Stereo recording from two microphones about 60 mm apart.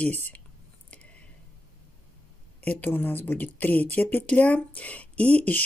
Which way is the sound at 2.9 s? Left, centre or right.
Left.